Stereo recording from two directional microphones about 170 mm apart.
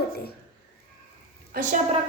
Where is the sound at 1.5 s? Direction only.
50° right (ahead or behind).